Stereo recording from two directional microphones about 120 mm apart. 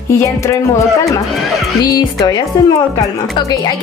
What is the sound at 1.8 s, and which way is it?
Speech, 35° left (ahead or behind).